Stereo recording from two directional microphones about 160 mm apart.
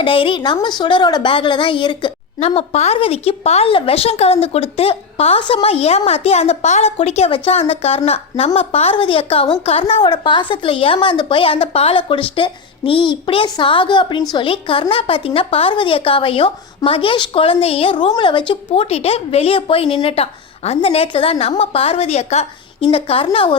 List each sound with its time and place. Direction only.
0.0 s a woman's voice: 35° left (ahead or behind)